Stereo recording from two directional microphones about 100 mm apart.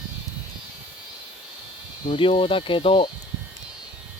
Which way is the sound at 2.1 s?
65° left (ahead or behind).